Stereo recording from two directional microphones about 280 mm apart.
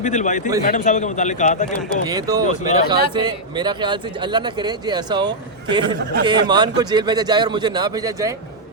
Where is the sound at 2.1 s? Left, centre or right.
Centre.